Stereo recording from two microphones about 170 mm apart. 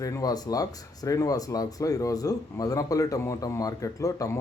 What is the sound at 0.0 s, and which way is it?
Speech, 20° left (ahead or behind).